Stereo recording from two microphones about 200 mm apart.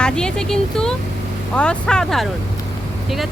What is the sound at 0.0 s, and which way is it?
Speech, 5° left (ahead or behind).